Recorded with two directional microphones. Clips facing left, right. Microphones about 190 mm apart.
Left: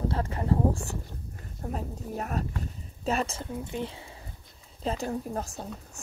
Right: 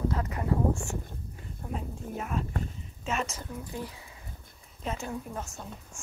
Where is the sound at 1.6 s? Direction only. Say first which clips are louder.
Left 2 dB; 40° left (ahead or behind).